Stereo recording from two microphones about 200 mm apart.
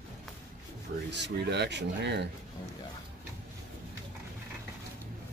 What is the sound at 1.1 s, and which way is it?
Speech, 60° right (ahead or behind).